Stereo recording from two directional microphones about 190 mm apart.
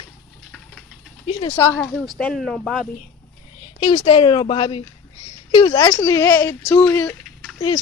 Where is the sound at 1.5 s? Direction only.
15° left (ahead or behind).